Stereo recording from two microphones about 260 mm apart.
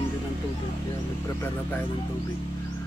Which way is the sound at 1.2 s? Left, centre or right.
Centre.